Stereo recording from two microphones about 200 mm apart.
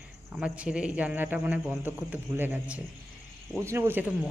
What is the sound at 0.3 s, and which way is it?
A man's voice, 5° right (ahead or behind).